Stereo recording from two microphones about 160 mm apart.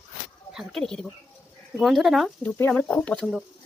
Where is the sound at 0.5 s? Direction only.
Centre (ahead or behind).